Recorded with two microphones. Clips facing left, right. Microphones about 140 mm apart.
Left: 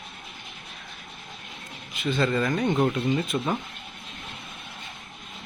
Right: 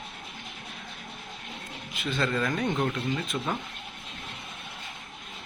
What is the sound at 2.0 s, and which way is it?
Speech, 5° left (ahead or behind).